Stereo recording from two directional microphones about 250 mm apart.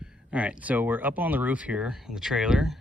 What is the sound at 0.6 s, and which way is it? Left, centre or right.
Speech, centre.